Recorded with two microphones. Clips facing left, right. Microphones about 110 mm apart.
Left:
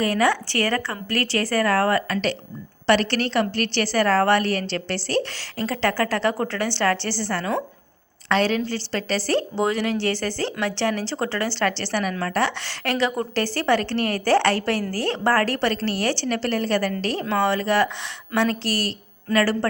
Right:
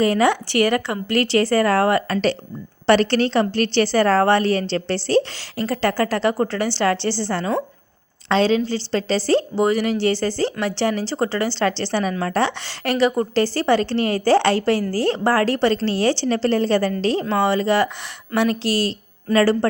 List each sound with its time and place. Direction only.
0.0 s a woman's voice: 25° right (ahead or behind)
5.5 s a woman's voice: 10° right (ahead or behind); by 19.5 s 25° right (ahead or behind)